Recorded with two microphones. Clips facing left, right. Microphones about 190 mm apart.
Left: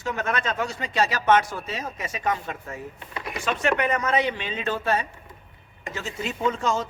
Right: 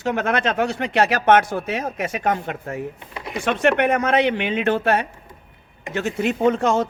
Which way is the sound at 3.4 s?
65° right (ahead or behind).